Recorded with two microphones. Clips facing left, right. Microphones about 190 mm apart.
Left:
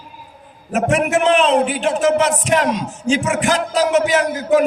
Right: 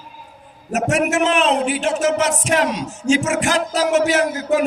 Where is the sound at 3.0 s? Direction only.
45° right (ahead or behind).